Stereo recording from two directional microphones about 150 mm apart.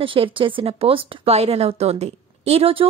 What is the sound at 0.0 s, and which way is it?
Speech, 35° right (ahead or behind).